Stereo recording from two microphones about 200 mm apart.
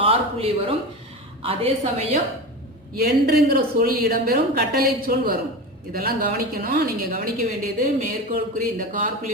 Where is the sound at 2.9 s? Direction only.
50° right (ahead or behind).